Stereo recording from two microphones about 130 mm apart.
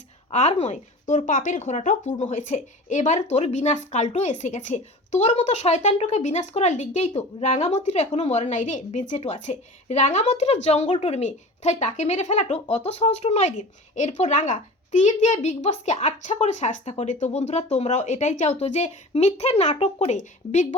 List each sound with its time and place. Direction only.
0.3 s speech: 55° left (ahead or behind)
13.9 s speech: 65° left (ahead or behind)
20.0 s speech: 70° left (ahead or behind)